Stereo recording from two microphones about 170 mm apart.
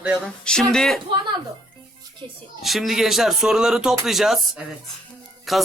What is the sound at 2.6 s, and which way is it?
Speech, centre (ahead or behind).